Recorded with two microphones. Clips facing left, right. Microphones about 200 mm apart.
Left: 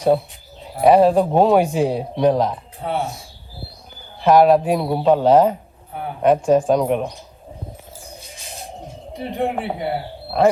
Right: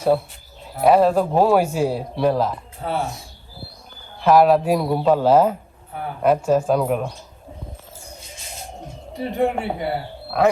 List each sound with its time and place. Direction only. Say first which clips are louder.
0.8 s a man's voice: left 2 dB; centre (ahead or behind)
1.2 s speech: left 2 dB; 20° left (ahead or behind)
1.5 s a man's voice: left 2 dB; centre (ahead or behind)
4.2 s a man's voice: left 2 dB; centre (ahead or behind)
5.2 s a man's voice: left 2 dB; 5° right (ahead or behind)
9.1 s a man's voice: right 2 dB; centre (ahead or behind)